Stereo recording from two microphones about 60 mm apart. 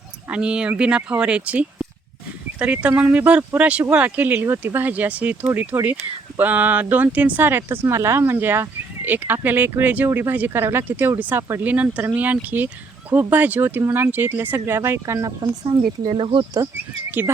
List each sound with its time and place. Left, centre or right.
0.3 s speech: centre; by 14.8 s right
14.8 s speech: right
17.1 s speech: right